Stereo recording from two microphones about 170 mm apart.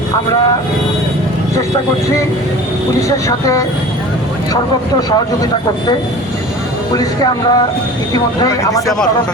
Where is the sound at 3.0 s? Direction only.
20° left (ahead or behind).